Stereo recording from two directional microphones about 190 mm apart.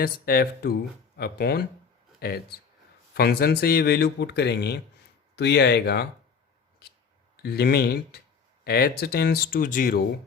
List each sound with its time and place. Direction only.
0.0 s speech: 55° left (ahead or behind)
7.4 s speech: 60° left (ahead or behind)